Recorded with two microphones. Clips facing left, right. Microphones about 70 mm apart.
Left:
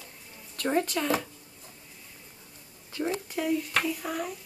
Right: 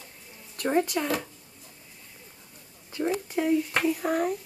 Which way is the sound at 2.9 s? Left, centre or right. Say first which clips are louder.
Right 3 dB; right.